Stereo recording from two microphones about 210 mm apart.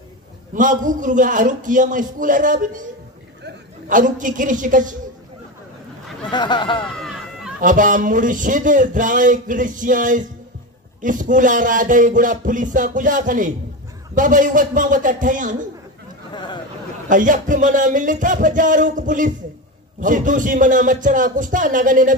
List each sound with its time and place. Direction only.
0.6 s a woman's voice: 40° right (ahead or behind)
6.3 s a sound: 20° left (ahead or behind)
7.6 s speech: 40° right (ahead or behind)
17.1 s speech: 40° right (ahead or behind)